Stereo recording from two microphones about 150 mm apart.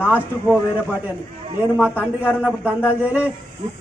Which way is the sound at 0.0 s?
10° right (ahead or behind).